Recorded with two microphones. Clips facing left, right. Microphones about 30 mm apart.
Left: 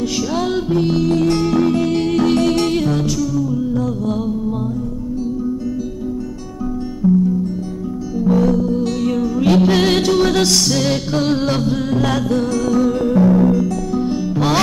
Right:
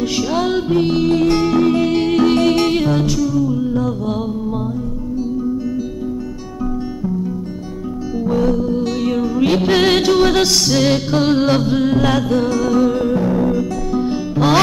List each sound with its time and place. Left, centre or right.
0.0 s music: centre
0.7 s music: right
8.2 s music: centre